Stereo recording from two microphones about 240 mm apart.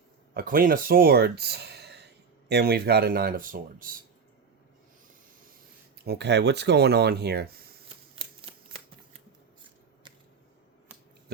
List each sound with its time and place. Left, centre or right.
0.3 s speech: right
6.1 s speech: right